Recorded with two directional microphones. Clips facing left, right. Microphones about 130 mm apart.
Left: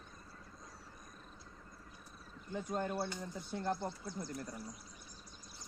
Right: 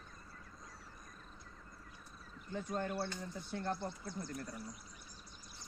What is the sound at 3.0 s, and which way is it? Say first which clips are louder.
Speech: left 1 dB; 15° left (ahead or behind).